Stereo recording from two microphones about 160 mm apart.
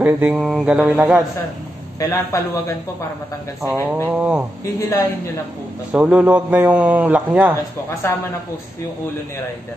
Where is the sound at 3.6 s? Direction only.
10° right (ahead or behind).